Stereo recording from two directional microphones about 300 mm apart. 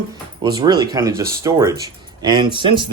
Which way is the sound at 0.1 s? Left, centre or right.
Centre.